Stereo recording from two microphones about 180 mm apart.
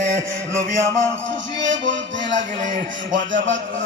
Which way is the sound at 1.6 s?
85° right.